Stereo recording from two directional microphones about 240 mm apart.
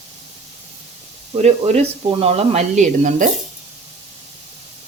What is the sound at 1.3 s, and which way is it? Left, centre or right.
Speech, right.